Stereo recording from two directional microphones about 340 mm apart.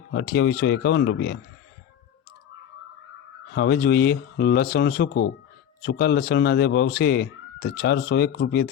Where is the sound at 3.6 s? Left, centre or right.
Left.